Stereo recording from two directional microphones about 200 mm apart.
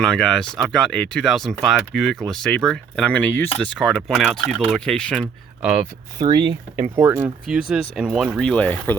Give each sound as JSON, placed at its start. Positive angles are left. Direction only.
{"t": 0.0, "sound": "speech", "side_deg": 5}
{"t": 6.1, "sound": "speech", "side_deg": -20}
{"t": 6.9, "sound": "speech", "side_deg": -10}